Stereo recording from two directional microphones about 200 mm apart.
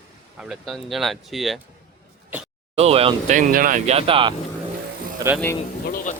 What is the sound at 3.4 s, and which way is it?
Speech, 45° right (ahead or behind).